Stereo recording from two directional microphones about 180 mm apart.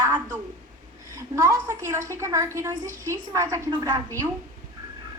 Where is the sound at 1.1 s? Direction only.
15° right (ahead or behind).